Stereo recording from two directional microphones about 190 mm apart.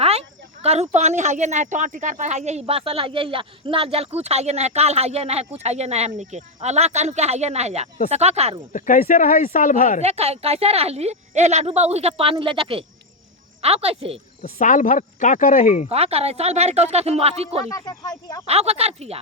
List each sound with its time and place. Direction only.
0.0 s speech: 30° right (ahead or behind)
8.7 s speech: 45° left (ahead or behind)
10.0 s speech: 35° right (ahead or behind)
14.4 s speech: 45° left (ahead or behind)
15.9 s speech: 35° right (ahead or behind)
17.7 s speech: 20° left (ahead or behind)
18.4 s speech: 35° right (ahead or behind)